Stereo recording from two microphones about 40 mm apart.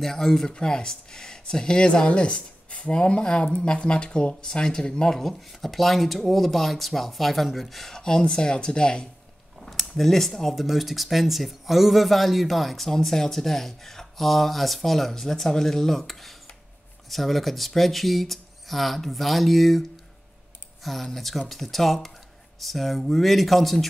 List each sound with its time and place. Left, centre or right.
0.0 s speech: centre
8.0 s speech: centre
9.7 s speech: centre
20.8 s speech: centre